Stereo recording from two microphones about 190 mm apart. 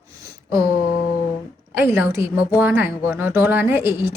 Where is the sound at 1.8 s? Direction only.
10° right (ahead or behind).